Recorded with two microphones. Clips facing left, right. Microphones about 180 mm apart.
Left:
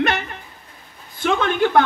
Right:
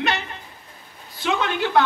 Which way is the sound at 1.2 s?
50° left (ahead or behind).